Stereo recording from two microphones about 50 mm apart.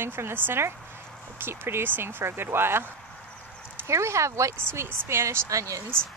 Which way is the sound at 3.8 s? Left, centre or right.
Right.